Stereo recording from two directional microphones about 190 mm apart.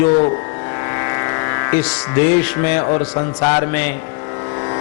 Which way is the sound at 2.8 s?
30° left (ahead or behind).